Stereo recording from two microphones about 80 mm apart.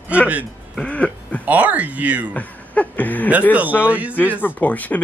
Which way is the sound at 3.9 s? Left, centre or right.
Centre.